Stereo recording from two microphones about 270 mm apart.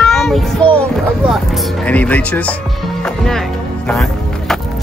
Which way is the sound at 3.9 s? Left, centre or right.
Centre.